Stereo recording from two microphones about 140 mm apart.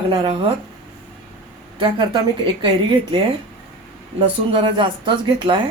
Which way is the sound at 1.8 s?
35° right (ahead or behind).